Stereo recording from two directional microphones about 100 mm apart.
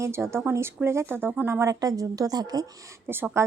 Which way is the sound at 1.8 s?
35° right (ahead or behind).